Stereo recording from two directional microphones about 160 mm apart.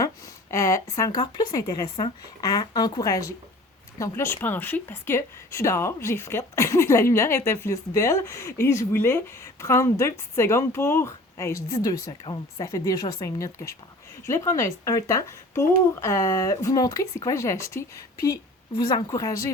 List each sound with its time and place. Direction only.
0.5 s speech: 20° left (ahead or behind)